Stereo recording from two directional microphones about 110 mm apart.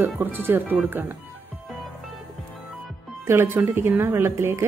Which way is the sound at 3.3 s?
20° right (ahead or behind).